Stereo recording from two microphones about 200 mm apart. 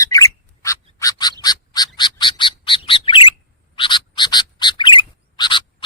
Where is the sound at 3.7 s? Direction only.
25° left (ahead or behind).